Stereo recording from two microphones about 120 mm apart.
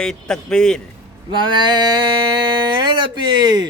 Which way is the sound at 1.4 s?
40° right (ahead or behind).